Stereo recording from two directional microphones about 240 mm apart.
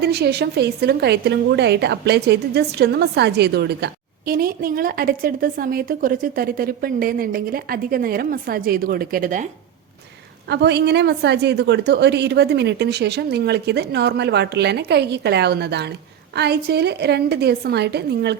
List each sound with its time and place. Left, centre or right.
0.0 s a woman's voice: right
10.5 s a woman's voice: right